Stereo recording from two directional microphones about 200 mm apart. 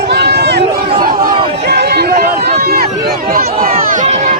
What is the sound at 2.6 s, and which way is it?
Run, 50° right (ahead or behind).